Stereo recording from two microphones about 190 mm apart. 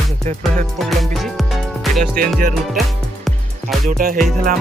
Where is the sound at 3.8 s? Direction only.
50° right (ahead or behind).